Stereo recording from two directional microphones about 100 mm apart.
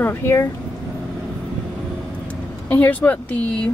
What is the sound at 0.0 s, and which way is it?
Speech, 25° left (ahead or behind).